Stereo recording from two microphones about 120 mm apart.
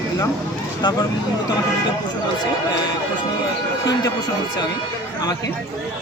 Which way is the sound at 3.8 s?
35° left (ahead or behind).